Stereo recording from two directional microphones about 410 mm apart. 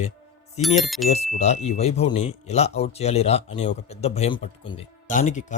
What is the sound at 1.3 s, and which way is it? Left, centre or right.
Speech, centre.